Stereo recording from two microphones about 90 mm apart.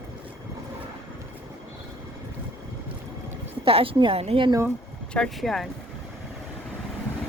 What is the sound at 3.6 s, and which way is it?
Speech, 90° right.